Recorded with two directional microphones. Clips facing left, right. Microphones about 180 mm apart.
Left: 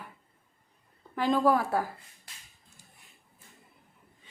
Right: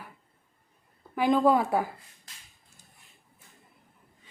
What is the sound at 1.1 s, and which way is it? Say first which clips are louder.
Speech: right 2 dB; 15° right (ahead or behind).